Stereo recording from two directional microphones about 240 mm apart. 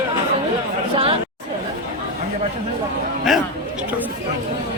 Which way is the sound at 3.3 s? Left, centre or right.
Centre.